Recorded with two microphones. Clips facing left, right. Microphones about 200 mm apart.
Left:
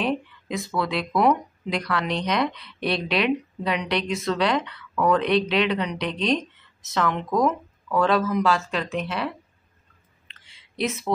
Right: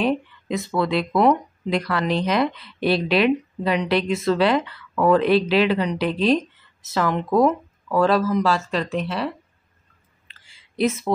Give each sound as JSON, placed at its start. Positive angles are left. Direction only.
{"t": 0.0, "sound": "a sound", "side_deg": 0}
{"t": 0.7, "sound": "speech", "side_deg": 0}
{"t": 10.8, "sound": "speech", "side_deg": 0}